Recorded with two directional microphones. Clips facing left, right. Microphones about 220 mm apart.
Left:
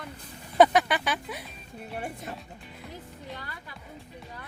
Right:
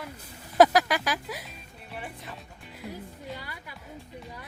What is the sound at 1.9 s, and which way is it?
Speech, 45° left (ahead or behind).